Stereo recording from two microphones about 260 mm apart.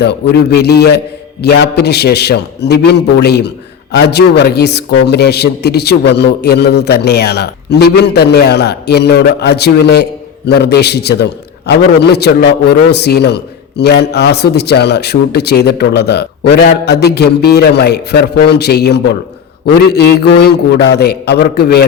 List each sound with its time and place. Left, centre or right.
0.0 s a man's voice: left